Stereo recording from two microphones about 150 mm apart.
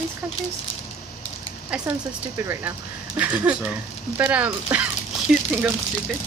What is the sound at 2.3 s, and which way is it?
Speech, 20° right (ahead or behind).